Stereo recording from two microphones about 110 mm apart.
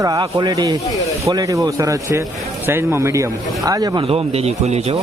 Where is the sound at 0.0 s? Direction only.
35° right (ahead or behind).